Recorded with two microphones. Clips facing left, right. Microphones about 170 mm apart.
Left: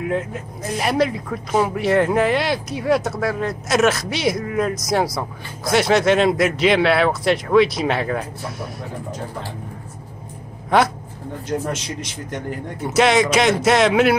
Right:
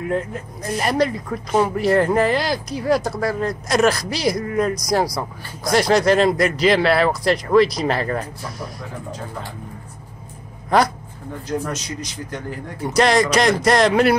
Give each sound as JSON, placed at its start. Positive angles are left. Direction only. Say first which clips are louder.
{"t": 0.0, "sound": "speech", "louder": "even", "side_deg": 5}
{"t": 10.7, "sound": "speech", "louder": "even", "side_deg": 0}
{"t": 12.8, "sound": "speech", "louder": "even", "side_deg": 5}